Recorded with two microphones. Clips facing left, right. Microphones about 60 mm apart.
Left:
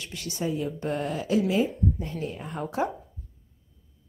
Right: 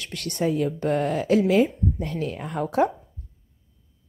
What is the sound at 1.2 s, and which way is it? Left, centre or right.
Speech, right.